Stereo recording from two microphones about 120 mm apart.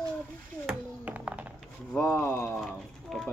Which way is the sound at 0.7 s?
10° right (ahead or behind).